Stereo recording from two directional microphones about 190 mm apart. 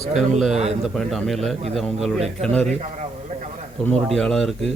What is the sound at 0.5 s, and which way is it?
Speech, 35° right (ahead or behind).